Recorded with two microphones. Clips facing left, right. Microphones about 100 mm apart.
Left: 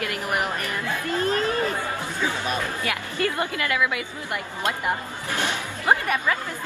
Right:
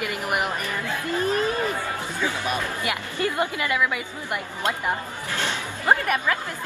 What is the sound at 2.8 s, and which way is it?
Speech, 15° right (ahead or behind).